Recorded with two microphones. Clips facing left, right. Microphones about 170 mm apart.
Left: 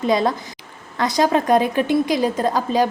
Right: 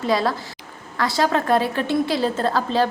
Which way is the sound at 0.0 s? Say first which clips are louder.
Left 2 dB; 20° left (ahead or behind).